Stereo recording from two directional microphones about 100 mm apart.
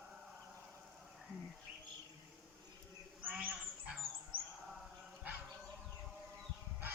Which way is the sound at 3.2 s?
15° right (ahead or behind).